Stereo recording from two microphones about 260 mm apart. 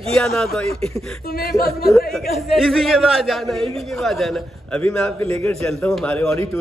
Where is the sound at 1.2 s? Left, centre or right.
Left.